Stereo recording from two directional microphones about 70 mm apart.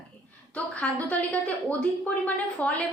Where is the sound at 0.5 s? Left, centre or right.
Centre.